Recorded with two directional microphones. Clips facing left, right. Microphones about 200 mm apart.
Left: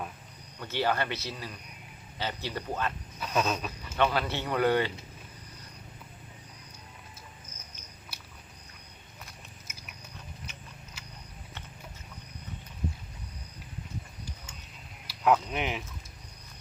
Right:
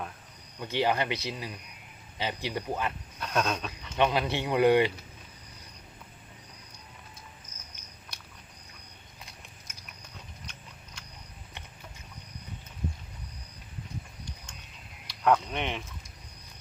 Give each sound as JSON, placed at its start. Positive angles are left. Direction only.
{"t": 0.6, "sound": "speech", "side_deg": -15}
{"t": 3.2, "sound": "speech", "side_deg": 5}
{"t": 3.9, "sound": "speech", "side_deg": -15}
{"t": 8.1, "sound": "a sound", "side_deg": 5}
{"t": 9.7, "sound": "biting", "side_deg": 10}
{"t": 10.4, "sound": "horse", "side_deg": 5}
{"t": 15.0, "sound": "a sound", "side_deg": 5}